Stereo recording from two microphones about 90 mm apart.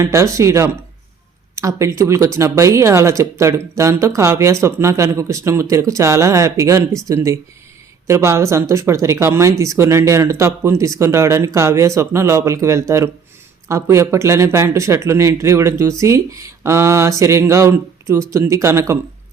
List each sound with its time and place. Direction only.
0.0 s speech: 35° right (ahead or behind)